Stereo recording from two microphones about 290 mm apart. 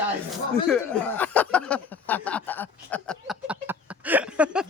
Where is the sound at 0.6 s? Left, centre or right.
Centre.